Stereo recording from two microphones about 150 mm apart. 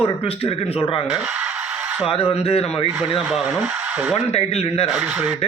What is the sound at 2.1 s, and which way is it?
Speech, 40° left (ahead or behind).